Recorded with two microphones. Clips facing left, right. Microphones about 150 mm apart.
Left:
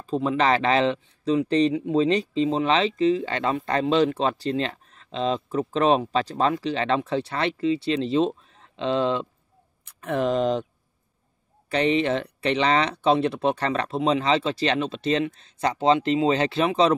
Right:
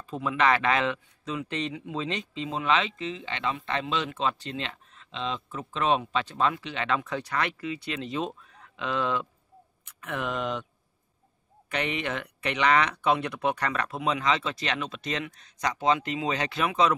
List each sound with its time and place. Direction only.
0.0 s speech: 30° left (ahead or behind)
11.7 s speech: 30° left (ahead or behind)